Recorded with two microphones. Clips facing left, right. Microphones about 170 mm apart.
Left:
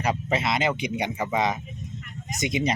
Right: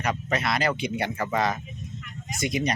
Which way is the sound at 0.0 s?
25° left (ahead or behind).